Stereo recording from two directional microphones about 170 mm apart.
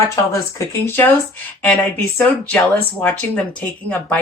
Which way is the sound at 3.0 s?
10° left (ahead or behind).